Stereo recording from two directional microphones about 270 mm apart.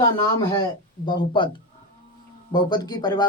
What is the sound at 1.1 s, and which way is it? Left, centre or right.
Speech, centre.